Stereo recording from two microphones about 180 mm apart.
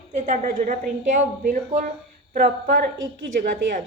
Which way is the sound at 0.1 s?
40° right (ahead or behind).